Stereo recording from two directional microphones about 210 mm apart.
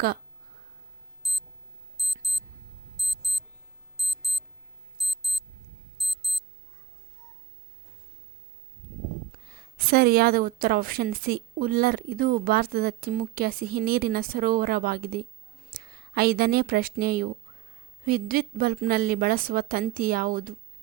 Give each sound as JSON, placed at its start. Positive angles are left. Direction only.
{"t": 1.2, "sound": "clock", "side_deg": 0}
{"t": 2.0, "sound": "alarm clock", "side_deg": 0}
{"t": 4.9, "sound": "clock", "side_deg": 0}
{"t": 6.0, "sound": "alarm clock", "side_deg": 0}
{"t": 9.3, "sound": "a woman's voice", "side_deg": -45}